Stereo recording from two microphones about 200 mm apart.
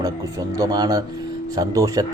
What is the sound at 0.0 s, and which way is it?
Speech, 15° right (ahead or behind).